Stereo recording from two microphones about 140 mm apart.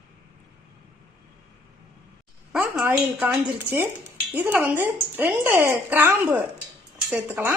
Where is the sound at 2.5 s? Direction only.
10° right (ahead or behind).